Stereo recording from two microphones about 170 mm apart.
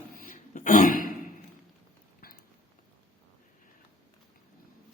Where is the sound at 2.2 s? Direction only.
60° left (ahead or behind).